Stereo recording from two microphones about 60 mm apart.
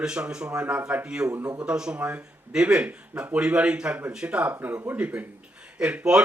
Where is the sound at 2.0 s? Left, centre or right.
Right.